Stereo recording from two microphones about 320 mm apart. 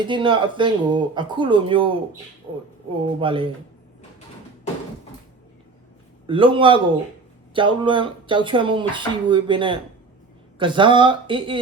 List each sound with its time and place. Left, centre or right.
0.1 s speech: centre
6.2 s speech: centre